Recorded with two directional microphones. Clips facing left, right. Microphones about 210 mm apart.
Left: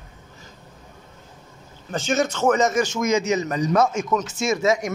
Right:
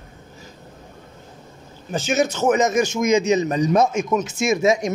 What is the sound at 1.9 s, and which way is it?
Speech, 5° right (ahead or behind).